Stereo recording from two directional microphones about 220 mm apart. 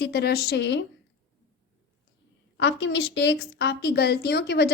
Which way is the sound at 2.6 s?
55° left (ahead or behind).